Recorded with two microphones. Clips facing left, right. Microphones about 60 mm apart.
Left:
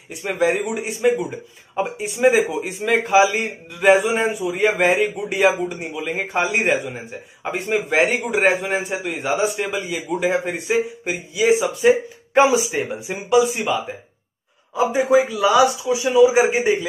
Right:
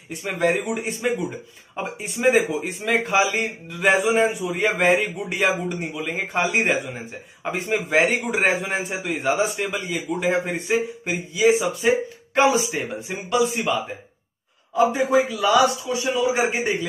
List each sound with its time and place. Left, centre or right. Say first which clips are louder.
0.1 s a man's voice: left 2 dB; centre